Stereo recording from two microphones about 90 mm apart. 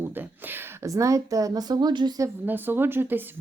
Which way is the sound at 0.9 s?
35° right (ahead or behind).